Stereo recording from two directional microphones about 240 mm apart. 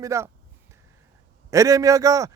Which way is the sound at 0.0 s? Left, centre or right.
Centre.